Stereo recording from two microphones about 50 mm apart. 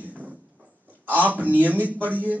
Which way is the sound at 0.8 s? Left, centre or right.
Right.